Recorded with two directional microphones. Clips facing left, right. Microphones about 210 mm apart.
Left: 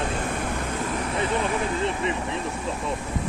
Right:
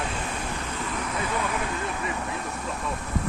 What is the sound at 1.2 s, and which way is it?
Speech, 25° left (ahead or behind).